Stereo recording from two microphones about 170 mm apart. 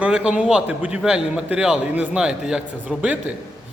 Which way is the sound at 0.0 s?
5° right (ahead or behind).